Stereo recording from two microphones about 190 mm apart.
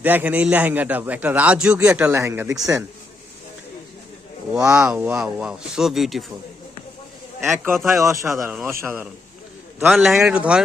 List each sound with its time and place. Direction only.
0.0 s a man's voice: 10° right (ahead or behind)
4.8 s speech: 5° right (ahead or behind)
7.7 s speech: centre (ahead or behind)
8.0 s a man's voice: 15° right (ahead or behind)